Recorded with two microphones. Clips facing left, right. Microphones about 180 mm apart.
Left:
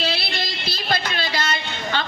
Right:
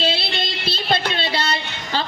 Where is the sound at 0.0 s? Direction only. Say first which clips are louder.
Right 3 dB; 25° right (ahead or behind).